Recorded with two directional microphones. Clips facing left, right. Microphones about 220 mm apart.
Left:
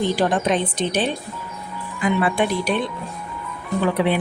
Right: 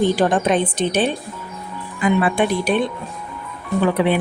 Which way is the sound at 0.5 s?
50° right (ahead or behind).